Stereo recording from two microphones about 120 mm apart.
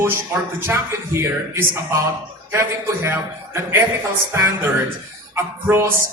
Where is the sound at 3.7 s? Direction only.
20° right (ahead or behind).